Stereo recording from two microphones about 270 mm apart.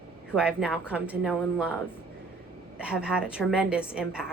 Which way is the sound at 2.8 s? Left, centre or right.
Centre.